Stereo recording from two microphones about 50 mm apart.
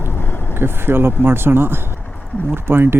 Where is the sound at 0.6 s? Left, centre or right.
Right.